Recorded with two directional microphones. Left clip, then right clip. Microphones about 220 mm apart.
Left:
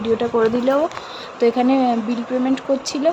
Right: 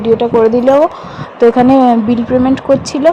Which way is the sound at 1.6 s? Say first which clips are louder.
Right 9 dB; 20° right (ahead or behind).